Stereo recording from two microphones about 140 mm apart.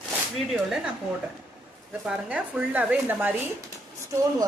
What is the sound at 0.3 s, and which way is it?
Speech, centre (ahead or behind).